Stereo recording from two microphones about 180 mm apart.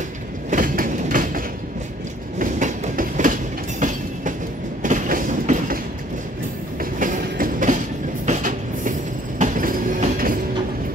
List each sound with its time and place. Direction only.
0.5 s train: 50° right (ahead or behind)
6.8 s train: 50° right (ahead or behind)